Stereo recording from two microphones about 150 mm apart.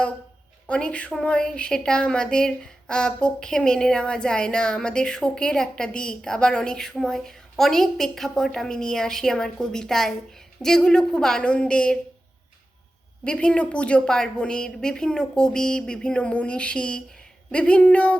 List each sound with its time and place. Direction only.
0.7 s a woman's voice: 10° left (ahead or behind)
13.2 s a woman's voice: 5° left (ahead or behind)